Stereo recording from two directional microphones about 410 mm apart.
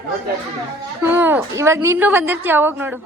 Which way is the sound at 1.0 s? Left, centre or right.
Centre.